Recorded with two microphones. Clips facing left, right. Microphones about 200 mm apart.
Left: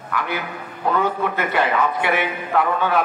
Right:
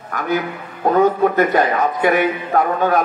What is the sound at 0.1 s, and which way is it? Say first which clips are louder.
A man's voice: right 5 dB; 45° right (ahead or behind).